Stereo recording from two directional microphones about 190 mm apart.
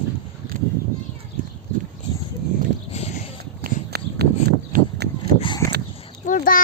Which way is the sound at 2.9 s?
35° left (ahead or behind).